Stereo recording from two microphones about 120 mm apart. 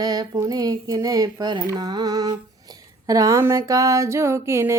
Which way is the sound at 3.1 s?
30° right (ahead or behind).